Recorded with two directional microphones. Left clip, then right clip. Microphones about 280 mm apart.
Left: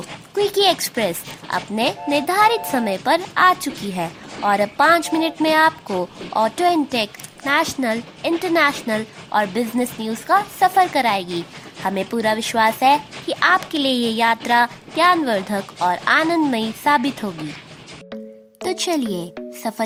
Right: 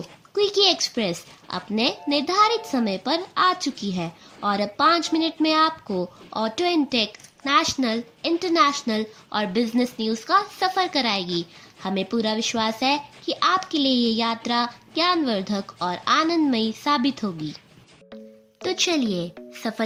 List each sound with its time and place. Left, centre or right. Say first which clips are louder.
0.3 s a woman's voice: left 3 dB; left
18.6 s a woman's voice: left 1 dB; left